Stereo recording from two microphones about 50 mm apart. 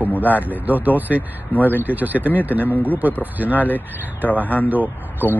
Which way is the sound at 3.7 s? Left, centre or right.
Left.